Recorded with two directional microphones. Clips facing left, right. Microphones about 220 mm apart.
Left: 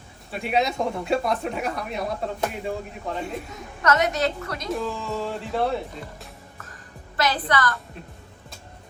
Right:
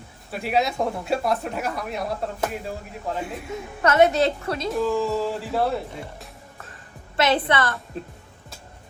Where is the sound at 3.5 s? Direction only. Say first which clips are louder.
Right 3 dB; 30° right (ahead or behind).